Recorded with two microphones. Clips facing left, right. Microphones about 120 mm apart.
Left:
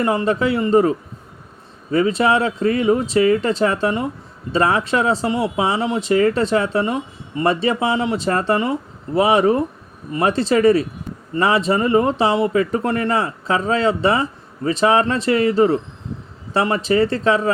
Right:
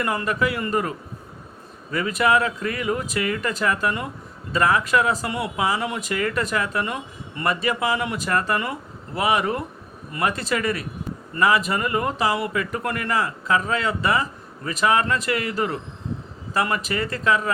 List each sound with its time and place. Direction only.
0.0 s speech: 25° left (ahead or behind)